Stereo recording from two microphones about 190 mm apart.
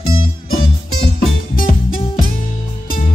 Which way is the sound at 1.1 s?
50° left (ahead or behind).